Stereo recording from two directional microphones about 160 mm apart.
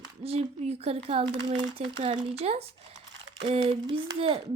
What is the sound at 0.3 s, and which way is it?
Speech, 40° right (ahead or behind).